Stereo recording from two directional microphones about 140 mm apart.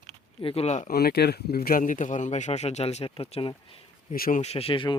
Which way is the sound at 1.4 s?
90° left.